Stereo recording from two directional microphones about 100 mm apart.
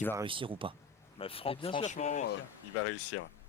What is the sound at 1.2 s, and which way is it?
Speech, 70° left (ahead or behind).